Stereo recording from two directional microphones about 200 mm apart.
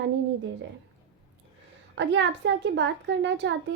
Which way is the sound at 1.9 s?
60° right (ahead or behind).